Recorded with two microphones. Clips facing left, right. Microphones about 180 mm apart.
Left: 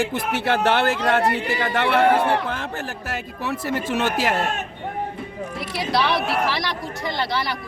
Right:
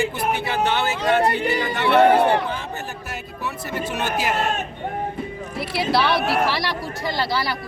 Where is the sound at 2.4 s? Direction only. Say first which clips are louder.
Even; 90° left.